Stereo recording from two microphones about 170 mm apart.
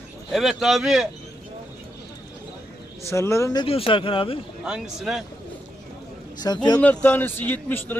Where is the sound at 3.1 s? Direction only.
15° left (ahead or behind).